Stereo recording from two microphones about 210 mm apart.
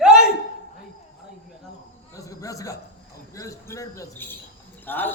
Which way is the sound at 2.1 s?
15° left (ahead or behind).